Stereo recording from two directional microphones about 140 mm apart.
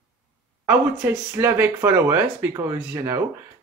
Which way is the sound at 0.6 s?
15° right (ahead or behind).